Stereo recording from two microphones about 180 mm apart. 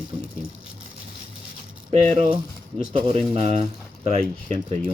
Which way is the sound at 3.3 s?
35° right (ahead or behind).